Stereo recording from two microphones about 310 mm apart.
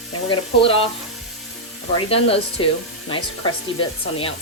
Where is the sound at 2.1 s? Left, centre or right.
Centre.